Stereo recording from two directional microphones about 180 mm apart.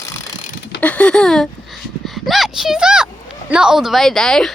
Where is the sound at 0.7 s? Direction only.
10° left (ahead or behind).